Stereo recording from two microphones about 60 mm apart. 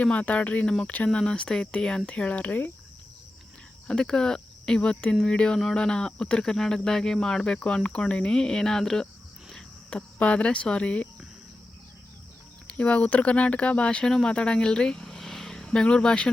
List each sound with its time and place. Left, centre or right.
0.0 s speech: left
3.8 s speech: centre
9.5 s cricket: centre
10.2 s speech: left
12.6 s speech: centre